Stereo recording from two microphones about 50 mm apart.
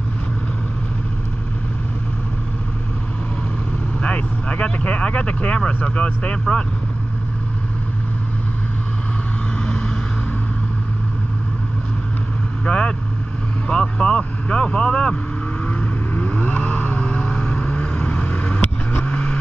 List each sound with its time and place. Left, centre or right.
4.0 s speech: left
12.6 s vehicle: left
15.6 s vehicle: left